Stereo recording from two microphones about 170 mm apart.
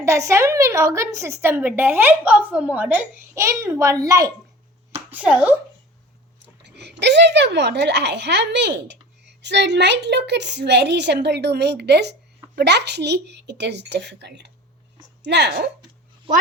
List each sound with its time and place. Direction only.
0.0 s a woman's voice: 15° right (ahead or behind)
5.1 s a woman's voice: 5° right (ahead or behind)
6.6 s a sound: 90° right
7.0 s a woman's voice: 90° right